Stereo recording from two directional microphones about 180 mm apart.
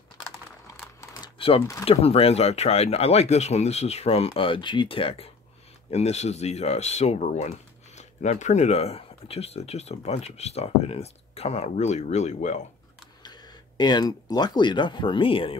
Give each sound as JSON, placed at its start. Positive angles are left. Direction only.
{"t": 1.2, "sound": "a sound", "side_deg": 30}
{"t": 1.9, "sound": "speech", "side_deg": 35}
{"t": 13.2, "sound": "speech", "side_deg": 25}